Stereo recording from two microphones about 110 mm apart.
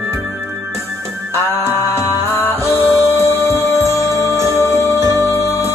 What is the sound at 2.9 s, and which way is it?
Music, 25° right (ahead or behind).